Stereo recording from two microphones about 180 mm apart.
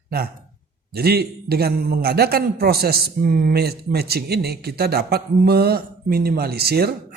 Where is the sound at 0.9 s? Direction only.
60° right (ahead or behind).